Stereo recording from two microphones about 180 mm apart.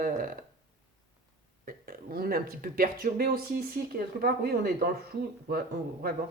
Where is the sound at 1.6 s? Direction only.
50° right (ahead or behind).